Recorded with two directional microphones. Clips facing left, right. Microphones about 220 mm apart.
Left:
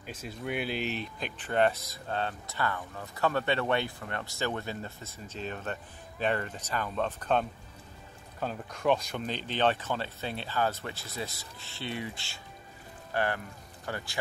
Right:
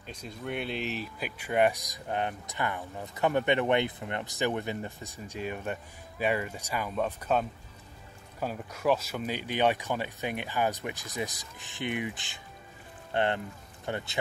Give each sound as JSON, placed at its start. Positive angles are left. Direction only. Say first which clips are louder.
{"t": 0.0, "sound": "speech", "louder": "left 1 dB", "side_deg": 5}